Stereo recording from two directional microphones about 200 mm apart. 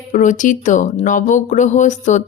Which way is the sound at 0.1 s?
40° left (ahead or behind).